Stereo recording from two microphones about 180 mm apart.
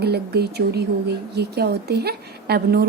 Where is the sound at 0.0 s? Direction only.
60° right (ahead or behind).